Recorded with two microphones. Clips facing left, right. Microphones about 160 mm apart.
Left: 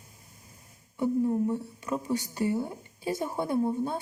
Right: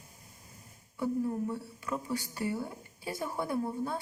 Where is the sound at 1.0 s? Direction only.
20° left (ahead or behind).